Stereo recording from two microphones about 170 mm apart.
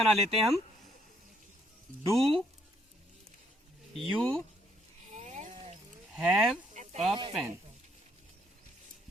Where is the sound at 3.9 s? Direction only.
5° left (ahead or behind).